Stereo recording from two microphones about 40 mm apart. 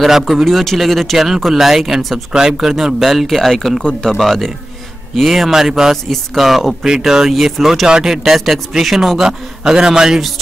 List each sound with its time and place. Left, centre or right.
0.0 s a man's voice: centre
2.3 s a man's voice: centre
3.3 s a man's voice: centre
5.5 s a man's voice: centre
7.8 s a man's voice: centre